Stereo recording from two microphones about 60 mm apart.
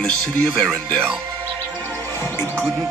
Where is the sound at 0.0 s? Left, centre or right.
Centre.